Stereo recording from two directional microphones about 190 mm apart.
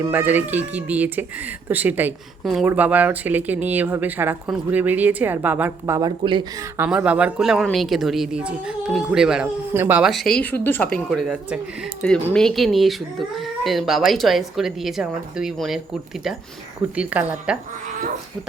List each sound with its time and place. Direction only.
0.0 s speech: 10° right (ahead or behind)
6.7 s speech: 5° right (ahead or behind)
16.9 s speech: 5° right (ahead or behind)